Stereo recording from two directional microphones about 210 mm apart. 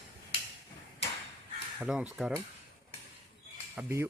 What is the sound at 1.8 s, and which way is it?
Speech, centre (ahead or behind).